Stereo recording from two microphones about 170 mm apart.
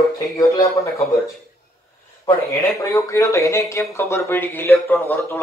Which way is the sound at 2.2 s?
20° left (ahead or behind).